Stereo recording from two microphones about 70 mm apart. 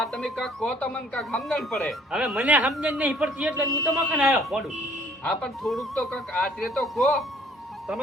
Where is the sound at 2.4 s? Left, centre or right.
Right.